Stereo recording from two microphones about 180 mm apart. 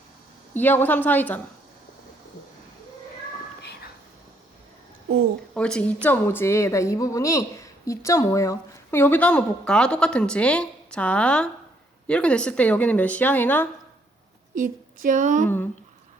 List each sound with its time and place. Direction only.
0.5 s speech: 10° left (ahead or behind)
3.6 s whispering: 65° left (ahead or behind)
5.5 s speech: 5° left (ahead or behind)
14.5 s a woman's voice: 50° right (ahead or behind)
15.4 s speech: 10° left (ahead or behind)